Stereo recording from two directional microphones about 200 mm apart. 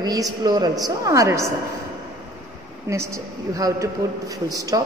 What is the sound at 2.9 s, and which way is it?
A man's voice, 15° right (ahead or behind).